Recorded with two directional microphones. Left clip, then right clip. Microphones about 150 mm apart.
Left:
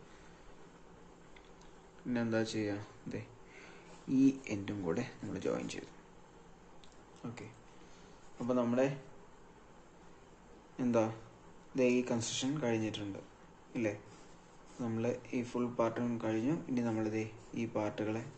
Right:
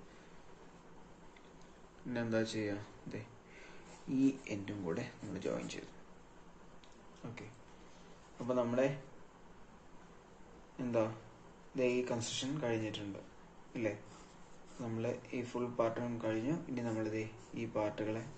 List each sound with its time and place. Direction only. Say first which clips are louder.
2.0 s speech: left 1 dB; 15° left (ahead or behind)
7.2 s speech: left 3 dB; 25° left (ahead or behind)
8.4 s speech: left 1 dB; 15° left (ahead or behind)
10.8 s speech: left 3 dB; 25° left (ahead or behind)
14.8 s speech: left 3 dB; 20° left (ahead or behind)